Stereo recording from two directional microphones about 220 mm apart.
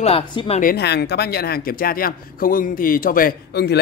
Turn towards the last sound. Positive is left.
turn(degrees=45)  # may be behind; listen again after turning